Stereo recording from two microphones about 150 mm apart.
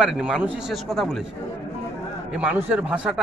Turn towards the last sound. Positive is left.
turn(degrees=-10)  # may be behind; listen again after turning